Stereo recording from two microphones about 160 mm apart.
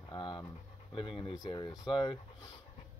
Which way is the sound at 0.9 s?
35° left (ahead or behind).